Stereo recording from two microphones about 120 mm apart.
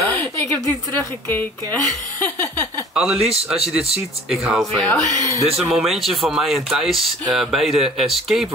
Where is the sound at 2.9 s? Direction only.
5° right (ahead or behind).